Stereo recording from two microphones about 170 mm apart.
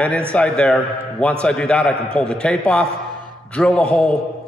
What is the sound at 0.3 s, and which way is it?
A man's voice, 5° left (ahead or behind).